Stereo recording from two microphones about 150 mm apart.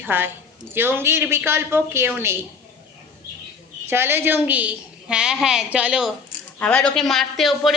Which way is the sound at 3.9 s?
15° right (ahead or behind).